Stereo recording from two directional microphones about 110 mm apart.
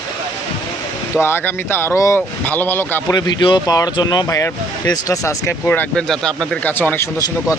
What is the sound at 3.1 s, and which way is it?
Speech, 40° left (ahead or behind).